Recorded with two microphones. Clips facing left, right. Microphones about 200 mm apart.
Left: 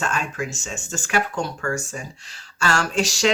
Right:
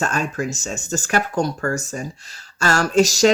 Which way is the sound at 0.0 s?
40° right (ahead or behind).